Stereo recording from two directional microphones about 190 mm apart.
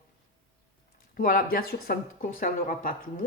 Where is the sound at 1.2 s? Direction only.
50° left (ahead or behind).